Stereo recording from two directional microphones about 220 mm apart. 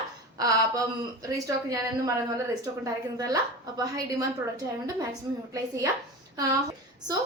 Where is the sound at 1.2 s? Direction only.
15° right (ahead or behind).